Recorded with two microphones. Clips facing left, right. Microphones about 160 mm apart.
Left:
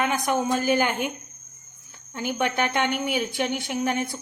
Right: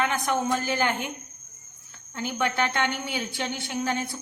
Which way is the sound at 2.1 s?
15° left (ahead or behind).